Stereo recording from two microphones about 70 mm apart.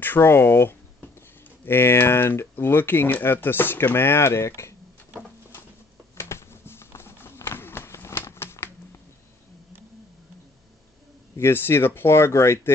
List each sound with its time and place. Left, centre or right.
0.0 s speech: left
6.1 s a sound: left
11.3 s speech: left